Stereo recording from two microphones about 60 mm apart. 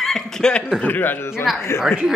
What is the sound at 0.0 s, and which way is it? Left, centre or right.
Speech, centre.